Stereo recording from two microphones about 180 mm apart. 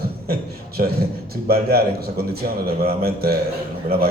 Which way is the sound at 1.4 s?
60° right (ahead or behind).